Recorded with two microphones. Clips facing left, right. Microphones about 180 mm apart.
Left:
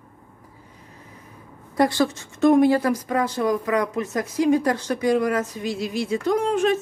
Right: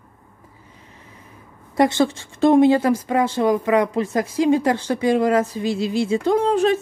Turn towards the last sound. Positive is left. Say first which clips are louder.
# right 3 dB
turn(degrees=-35)  # may be behind; listen again after turning